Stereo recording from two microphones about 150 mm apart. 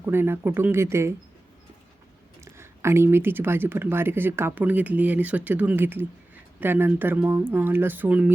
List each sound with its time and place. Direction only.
0.0 s speech: 15° right (ahead or behind)
2.4 s speech: 20° right (ahead or behind)